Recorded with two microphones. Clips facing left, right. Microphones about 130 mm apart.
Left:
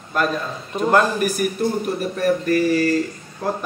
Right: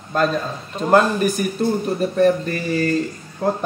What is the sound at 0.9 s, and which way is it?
A man's voice, 25° right (ahead or behind).